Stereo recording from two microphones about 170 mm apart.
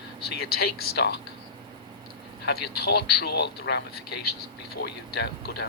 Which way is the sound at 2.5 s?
70° left (ahead or behind).